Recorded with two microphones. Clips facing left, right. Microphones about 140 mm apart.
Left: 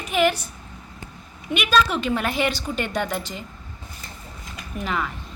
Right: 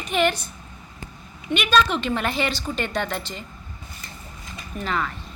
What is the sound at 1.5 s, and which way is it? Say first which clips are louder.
A woman's voice: even; 5° left (ahead or behind).